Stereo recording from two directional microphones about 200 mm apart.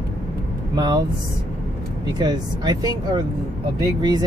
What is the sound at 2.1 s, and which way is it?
Speech, 20° right (ahead or behind).